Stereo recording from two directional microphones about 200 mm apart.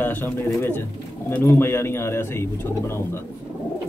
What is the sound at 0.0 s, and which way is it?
Speech, 10° left (ahead or behind).